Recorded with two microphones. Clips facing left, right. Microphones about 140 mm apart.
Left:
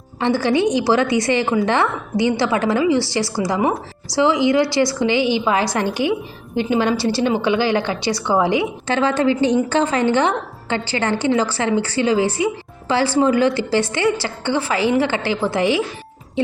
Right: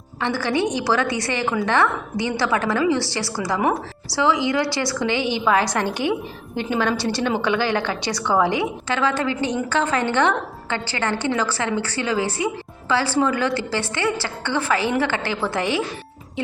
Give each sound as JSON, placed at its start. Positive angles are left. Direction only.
{"t": 0.2, "sound": "a woman's voice", "side_deg": 20}